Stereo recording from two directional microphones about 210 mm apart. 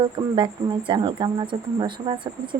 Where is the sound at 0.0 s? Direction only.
25° right (ahead or behind).